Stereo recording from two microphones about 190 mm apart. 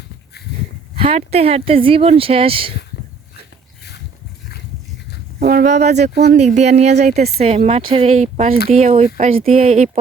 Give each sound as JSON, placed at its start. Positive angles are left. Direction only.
{"t": 0.9, "sound": "speech", "side_deg": -30}
{"t": 5.4, "sound": "speech", "side_deg": -45}